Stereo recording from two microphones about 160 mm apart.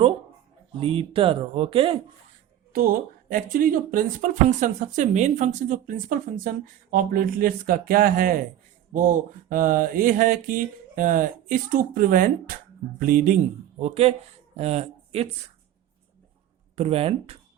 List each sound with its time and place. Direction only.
0.7 s speech: 35° right (ahead or behind)
2.7 s speech: 65° right (ahead or behind)
13.7 s speech: 40° right (ahead or behind)
16.7 s speech: 40° right (ahead or behind)